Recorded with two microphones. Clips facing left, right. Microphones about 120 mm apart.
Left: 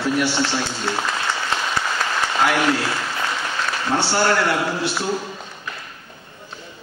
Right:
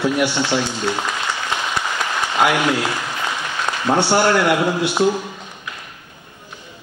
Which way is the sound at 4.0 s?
15° right (ahead or behind).